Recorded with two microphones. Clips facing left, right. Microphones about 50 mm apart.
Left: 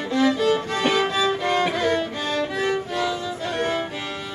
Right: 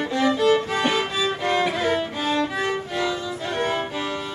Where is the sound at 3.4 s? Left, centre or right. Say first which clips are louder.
Even; centre.